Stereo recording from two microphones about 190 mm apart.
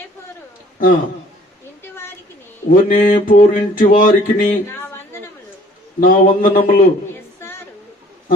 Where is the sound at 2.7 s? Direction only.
45° left (ahead or behind).